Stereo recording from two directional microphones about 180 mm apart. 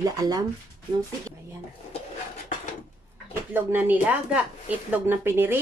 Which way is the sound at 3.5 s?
10° right (ahead or behind).